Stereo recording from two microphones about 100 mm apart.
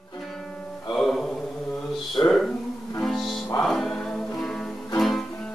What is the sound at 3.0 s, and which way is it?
Music, centre (ahead or behind).